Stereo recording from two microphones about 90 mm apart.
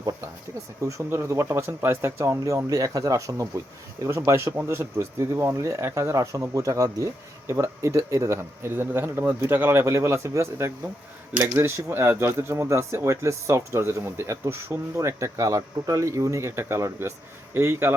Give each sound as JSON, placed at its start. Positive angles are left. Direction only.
{"t": 0.8, "sound": "speech", "side_deg": -35}